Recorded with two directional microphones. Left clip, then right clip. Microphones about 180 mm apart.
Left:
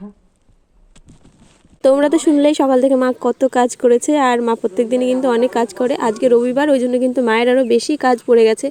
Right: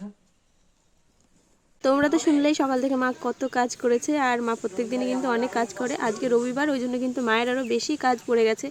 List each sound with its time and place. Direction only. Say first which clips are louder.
1.8 s speech: left 9 dB; 20° left (ahead or behind)